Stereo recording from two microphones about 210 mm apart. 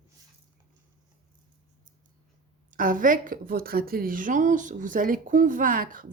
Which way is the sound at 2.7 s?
40° right (ahead or behind).